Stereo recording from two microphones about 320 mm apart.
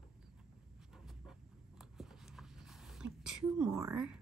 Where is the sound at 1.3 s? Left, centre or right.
Centre.